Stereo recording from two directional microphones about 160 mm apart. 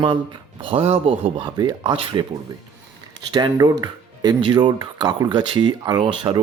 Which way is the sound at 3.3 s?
25° right (ahead or behind).